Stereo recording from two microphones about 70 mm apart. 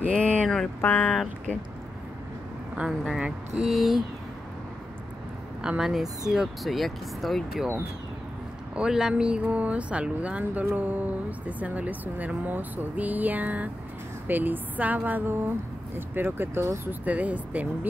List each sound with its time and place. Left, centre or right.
0.1 s a sound: left
0.7 s speech: left
2.9 s speech: centre
5.6 s speech: centre
8.7 s speech: centre; by 16.6 s right
16.6 s speech: right
17.0 s speech: right